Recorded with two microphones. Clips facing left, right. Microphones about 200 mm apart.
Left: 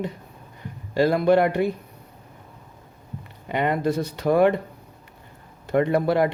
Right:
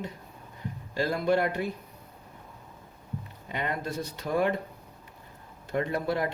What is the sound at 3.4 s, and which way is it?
Speech, 70° left (ahead or behind).